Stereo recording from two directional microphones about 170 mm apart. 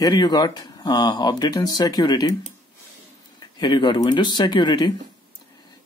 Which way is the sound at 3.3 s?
25° left (ahead or behind).